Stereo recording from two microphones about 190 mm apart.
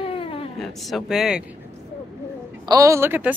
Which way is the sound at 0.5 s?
Centre (ahead or behind).